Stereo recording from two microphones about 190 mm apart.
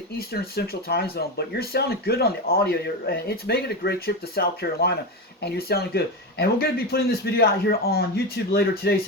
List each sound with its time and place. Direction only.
0.2 s speech: 55° left (ahead or behind)